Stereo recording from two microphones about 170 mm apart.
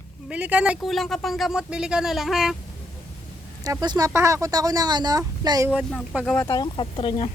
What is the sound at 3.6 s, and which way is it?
Speech, 20° right (ahead or behind).